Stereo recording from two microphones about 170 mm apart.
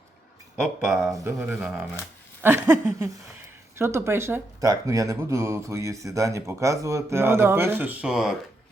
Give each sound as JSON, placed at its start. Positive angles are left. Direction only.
{"t": 0.5, "sound": "speech", "side_deg": 0}
{"t": 1.2, "sound": "speech", "side_deg": -15}